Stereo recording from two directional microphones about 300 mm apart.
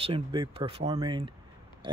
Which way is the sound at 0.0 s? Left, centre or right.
Centre.